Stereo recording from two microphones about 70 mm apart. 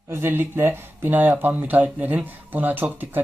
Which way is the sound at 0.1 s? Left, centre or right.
Right.